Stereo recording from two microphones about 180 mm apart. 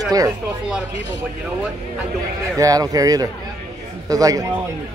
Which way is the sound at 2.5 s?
20° right (ahead or behind).